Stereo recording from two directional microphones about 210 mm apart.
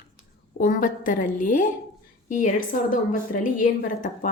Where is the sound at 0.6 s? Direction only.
40° left (ahead or behind).